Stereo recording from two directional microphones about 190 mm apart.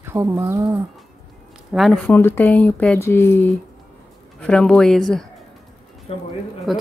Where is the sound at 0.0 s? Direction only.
15° right (ahead or behind).